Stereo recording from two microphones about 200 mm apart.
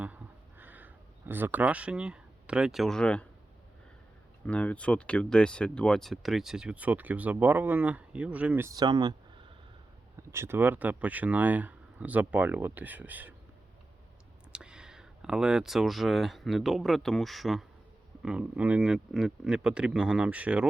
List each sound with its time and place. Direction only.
0.6 s crow: 10° right (ahead or behind)
1.3 s speech: 10° right (ahead or behind)
4.4 s speech: 5° left (ahead or behind); by 9.1 s 20° right (ahead or behind)
10.2 s speech: 15° right (ahead or behind)
14.5 s speech: 5° right (ahead or behind)